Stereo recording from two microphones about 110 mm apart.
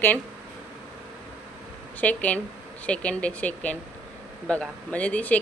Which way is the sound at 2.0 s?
15° left (ahead or behind).